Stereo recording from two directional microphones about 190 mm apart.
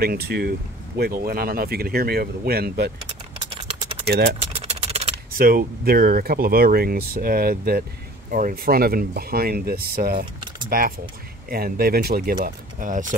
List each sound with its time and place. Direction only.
0.0 s speech: 55° right (ahead or behind)
4.1 s speech: 60° right (ahead or behind)
4.4 s a sound: 35° right (ahead or behind)
5.4 s speech: 50° right (ahead or behind)